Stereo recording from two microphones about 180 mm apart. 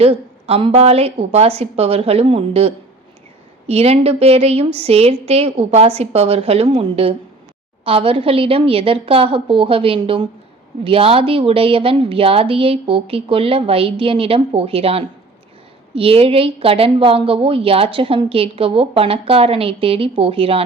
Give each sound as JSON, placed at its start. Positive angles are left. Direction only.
{"t": 0.0, "sound": "a woman's voice", "side_deg": -35}